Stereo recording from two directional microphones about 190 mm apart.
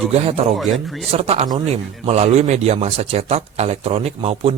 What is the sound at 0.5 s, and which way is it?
Speech, centre (ahead or behind).